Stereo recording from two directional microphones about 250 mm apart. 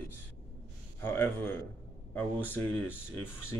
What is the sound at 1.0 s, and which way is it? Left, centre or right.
Speech, centre.